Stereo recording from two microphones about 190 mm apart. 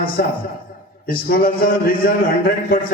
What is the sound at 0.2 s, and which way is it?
A man's voice, 50° left (ahead or behind).